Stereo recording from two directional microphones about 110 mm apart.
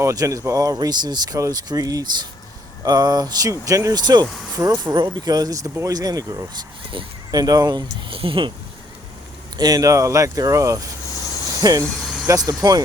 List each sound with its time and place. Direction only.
0.0 s speech: 30° right (ahead or behind)
8.1 s speech: 55° right (ahead or behind)
9.6 s speech: 35° right (ahead or behind)
12.0 s vehicle: centre (ahead or behind)
12.6 s speech: 35° right (ahead or behind)